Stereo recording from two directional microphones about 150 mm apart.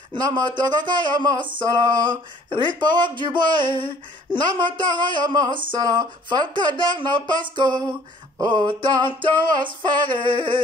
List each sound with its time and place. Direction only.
0.1 s speech: 30° right (ahead or behind)
7.5 s a sound: 30° right (ahead or behind)
8.4 s speech: 30° right (ahead or behind)